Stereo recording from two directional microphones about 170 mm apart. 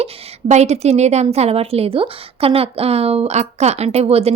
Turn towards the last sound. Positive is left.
turn(degrees=-35)  # may be behind; listen again after turning